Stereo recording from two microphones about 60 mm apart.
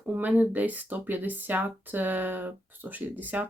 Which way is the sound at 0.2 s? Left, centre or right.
Right.